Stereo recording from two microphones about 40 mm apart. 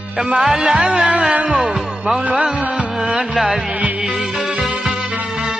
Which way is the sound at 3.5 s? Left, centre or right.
Centre.